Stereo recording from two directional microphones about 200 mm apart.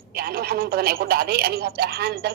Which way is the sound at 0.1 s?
50° right (ahead or behind).